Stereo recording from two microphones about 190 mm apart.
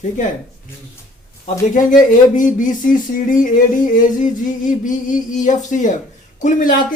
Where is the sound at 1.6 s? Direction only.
45° left (ahead or behind).